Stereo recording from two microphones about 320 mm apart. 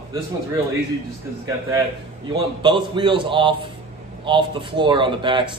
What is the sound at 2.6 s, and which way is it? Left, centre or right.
Speech, centre.